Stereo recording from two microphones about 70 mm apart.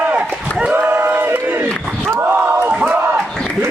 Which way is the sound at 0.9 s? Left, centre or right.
Right.